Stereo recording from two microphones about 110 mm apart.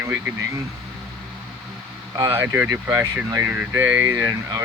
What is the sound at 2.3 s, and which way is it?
Speech, 20° right (ahead or behind).